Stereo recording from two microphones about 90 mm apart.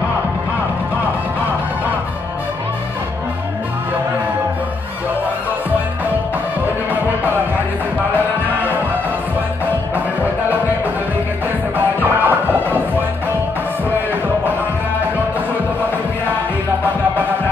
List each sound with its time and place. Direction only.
11.7 s music: 20° right (ahead or behind)